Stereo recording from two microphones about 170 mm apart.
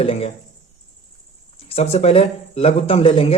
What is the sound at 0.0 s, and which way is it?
Speech, 35° left (ahead or behind).